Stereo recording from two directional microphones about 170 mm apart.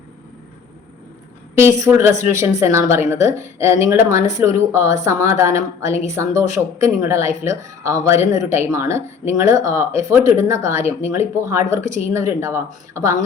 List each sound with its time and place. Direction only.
1.5 s speech: 20° right (ahead or behind)